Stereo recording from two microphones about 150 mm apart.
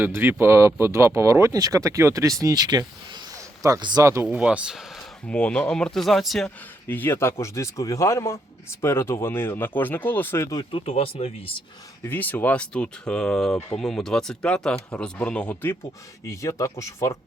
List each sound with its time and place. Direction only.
0.0 s speech: 15° right (ahead or behind)
4.3 s speech: 5° right (ahead or behind)
5.3 s speech: 10° left (ahead or behind)
6.8 s speech: 15° left (ahead or behind)
10.6 s speech: 35° left (ahead or behind)
12.0 s speech: 10° left (ahead or behind)